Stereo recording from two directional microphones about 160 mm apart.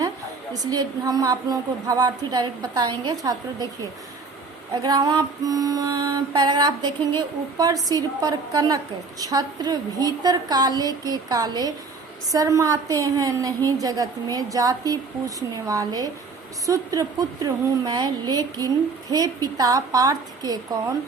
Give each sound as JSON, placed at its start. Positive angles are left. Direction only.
{"t": 0.7, "sound": "a woman's voice", "side_deg": -25}
{"t": 4.7, "sound": "a woman's voice", "side_deg": -25}